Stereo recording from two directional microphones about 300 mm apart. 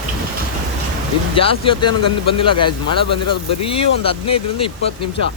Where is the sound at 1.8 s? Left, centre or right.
Left.